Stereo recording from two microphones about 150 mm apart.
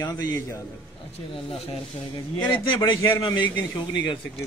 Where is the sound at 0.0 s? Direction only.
25° left (ahead or behind).